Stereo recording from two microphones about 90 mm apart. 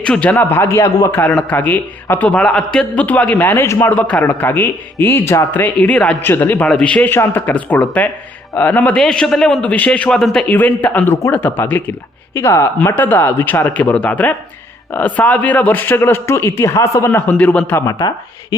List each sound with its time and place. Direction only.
0.0 s a man's voice: 10° left (ahead or behind); by 1.2 s 35° left (ahead or behind)
1.5 s a man's voice: 20° left (ahead or behind)
6.2 s a man's voice: 20° left (ahead or behind)
6.7 s a man's voice: 10° left (ahead or behind); by 17.1 s 35° left (ahead or behind)
17.1 s a man's voice: 20° left (ahead or behind)